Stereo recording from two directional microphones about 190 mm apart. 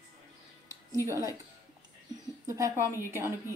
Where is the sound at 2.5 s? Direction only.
15° right (ahead or behind).